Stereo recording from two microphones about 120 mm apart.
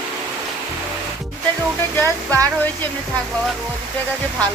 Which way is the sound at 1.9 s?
20° left (ahead or behind).